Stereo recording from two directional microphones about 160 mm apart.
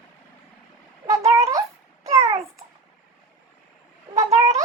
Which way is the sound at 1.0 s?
20° right (ahead or behind).